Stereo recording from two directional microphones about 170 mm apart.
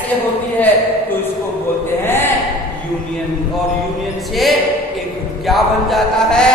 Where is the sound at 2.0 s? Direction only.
15° left (ahead or behind).